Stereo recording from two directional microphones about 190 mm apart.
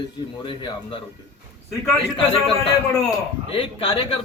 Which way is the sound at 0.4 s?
25° left (ahead or behind).